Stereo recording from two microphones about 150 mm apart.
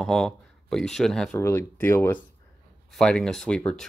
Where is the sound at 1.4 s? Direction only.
20° left (ahead or behind).